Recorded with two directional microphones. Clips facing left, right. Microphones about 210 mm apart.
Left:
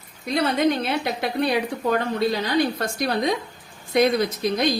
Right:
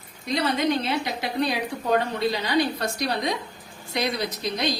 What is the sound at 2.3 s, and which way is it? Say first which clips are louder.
A woman's voice: left 2 dB; 50° left (ahead or behind).